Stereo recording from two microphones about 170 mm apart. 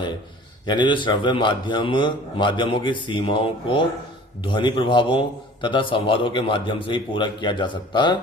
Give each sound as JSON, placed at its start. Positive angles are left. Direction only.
{"t": 0.6, "sound": "a man's voice", "side_deg": 25}